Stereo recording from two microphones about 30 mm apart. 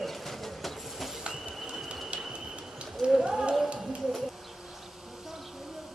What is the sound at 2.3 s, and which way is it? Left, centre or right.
Bird, right.